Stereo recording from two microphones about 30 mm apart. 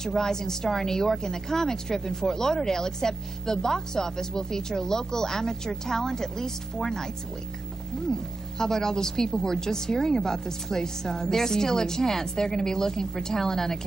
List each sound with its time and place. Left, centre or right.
0.0 s speech: centre
8.1 s speech: centre